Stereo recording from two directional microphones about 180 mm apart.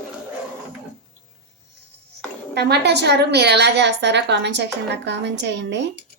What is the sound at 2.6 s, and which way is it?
A woman's voice, 70° right (ahead or behind).